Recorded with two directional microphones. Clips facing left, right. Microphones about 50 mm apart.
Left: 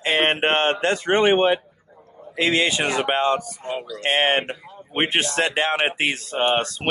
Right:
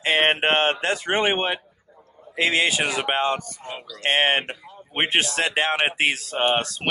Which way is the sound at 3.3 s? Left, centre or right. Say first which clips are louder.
Left 6 dB; centre.